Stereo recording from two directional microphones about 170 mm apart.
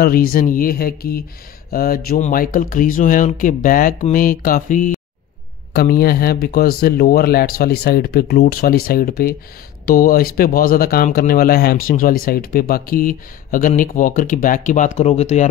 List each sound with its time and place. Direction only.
0.0 s speech: 60° left (ahead or behind)
5.8 s speech: 60° left (ahead or behind); by 15.4 s 40° left (ahead or behind)